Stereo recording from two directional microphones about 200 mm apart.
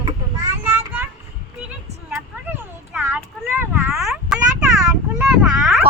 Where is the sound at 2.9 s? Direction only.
10° right (ahead or behind).